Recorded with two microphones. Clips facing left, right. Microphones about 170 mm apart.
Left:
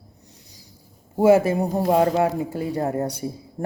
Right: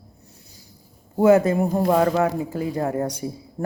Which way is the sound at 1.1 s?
25° left (ahead or behind).